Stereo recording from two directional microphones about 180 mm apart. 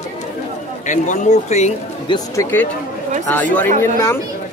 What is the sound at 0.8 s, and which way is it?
Speech, 40° left (ahead or behind).